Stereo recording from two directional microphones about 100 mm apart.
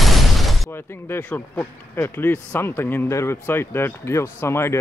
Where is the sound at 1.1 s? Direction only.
20° left (ahead or behind).